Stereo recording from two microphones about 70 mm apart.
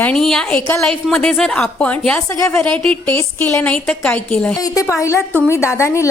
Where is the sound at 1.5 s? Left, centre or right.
Centre.